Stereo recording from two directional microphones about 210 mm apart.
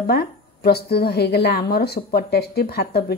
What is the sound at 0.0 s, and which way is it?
Speech, 45° left (ahead or behind).